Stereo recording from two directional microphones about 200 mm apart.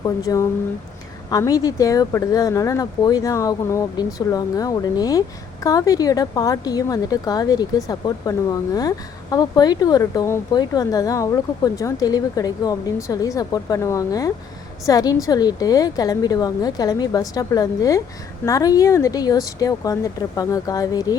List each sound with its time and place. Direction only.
0.0 s a woman's voice: 15° left (ahead or behind)